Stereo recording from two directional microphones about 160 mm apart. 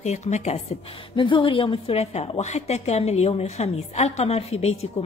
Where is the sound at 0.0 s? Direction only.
45° left (ahead or behind).